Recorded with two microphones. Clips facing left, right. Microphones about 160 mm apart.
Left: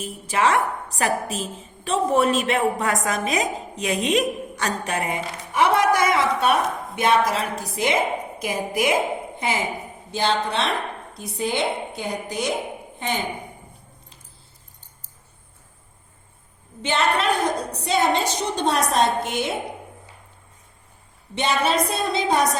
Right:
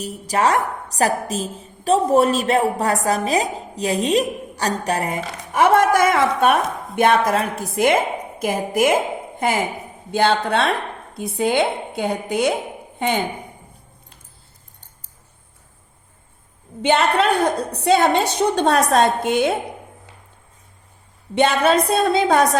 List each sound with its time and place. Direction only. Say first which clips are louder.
0.0 s a woman's voice: right 2 dB; 40° right (ahead or behind); by 12.5 s 60° right (ahead or behind)
17.3 s a woman's voice: right 4 dB; 60° right (ahead or behind)
21.3 s a woman's voice: right 6 dB; 55° right (ahead or behind)